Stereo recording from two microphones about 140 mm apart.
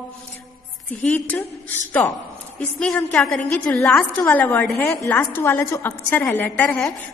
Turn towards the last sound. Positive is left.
turn(degrees=15)  # may be behind; listen again after turning